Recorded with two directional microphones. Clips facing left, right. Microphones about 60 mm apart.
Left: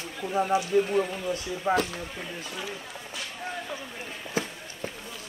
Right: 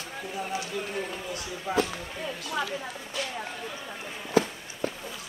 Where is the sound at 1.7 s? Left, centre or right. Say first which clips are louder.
Left 2 dB; left.